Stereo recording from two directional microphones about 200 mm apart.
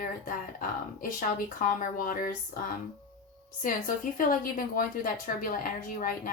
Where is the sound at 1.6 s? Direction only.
40° left (ahead or behind).